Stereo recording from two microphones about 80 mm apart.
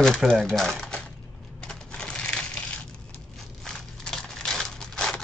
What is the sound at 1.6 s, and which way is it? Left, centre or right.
Crushing, centre.